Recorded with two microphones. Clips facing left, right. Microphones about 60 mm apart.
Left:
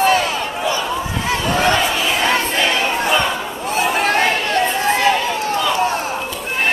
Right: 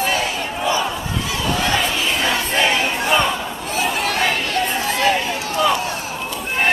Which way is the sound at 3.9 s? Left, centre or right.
Left.